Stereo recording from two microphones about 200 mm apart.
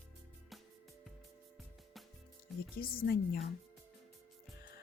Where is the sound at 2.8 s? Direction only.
50° left (ahead or behind).